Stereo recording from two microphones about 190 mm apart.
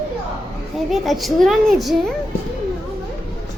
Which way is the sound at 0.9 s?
Centre (ahead or behind).